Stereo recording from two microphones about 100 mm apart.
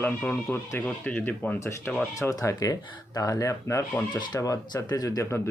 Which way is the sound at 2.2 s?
35° left (ahead or behind).